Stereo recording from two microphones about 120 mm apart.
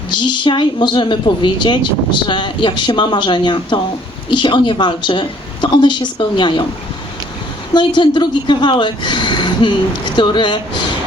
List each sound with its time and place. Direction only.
0.1 s a woman's voice: 40° left (ahead or behind)
7.7 s a woman's voice: 40° left (ahead or behind)